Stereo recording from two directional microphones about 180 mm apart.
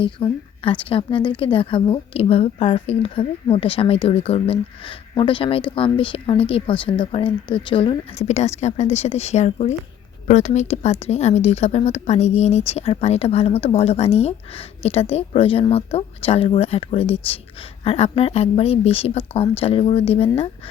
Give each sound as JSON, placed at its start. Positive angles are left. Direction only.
{"t": 0.0, "sound": "a woman's voice", "side_deg": 30}